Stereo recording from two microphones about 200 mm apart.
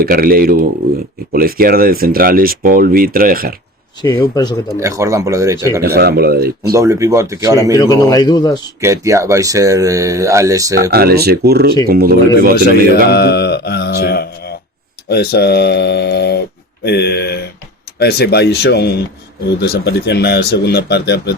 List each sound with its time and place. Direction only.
0.0 s speech: 45° right (ahead or behind)
4.0 s a man's voice: 25° left (ahead or behind)
4.8 s speech: 15° right (ahead or behind)
5.8 s speech: 50° right (ahead or behind)
6.7 s speech: 15° right (ahead or behind)
7.8 s a man's voice: 15° left (ahead or behind)
8.8 s speech: 15° right (ahead or behind)
10.9 s speech: 50° right (ahead or behind)
13.1 s speech: 55° left (ahead or behind)